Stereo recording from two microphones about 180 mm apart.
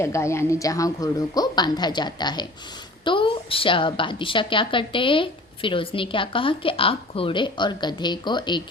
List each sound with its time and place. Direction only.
0.0 s a woman's voice: 15° left (ahead or behind)